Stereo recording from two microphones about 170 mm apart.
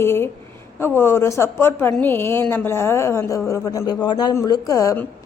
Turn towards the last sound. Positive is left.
turn(degrees=20)  # may be behind; listen again after turning